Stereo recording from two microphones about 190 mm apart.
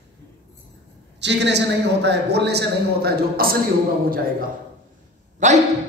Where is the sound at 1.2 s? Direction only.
65° right (ahead or behind).